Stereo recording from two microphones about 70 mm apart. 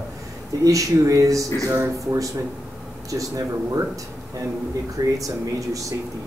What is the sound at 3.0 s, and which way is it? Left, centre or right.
Speech, right.